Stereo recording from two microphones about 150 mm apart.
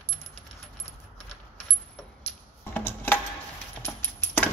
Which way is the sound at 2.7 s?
15° left (ahead or behind).